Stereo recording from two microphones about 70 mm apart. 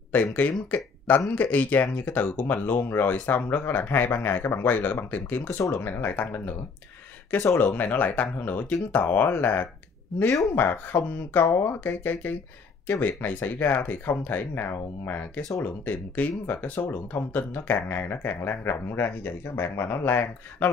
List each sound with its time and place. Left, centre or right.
0.1 s speech: left
7.5 s speech: left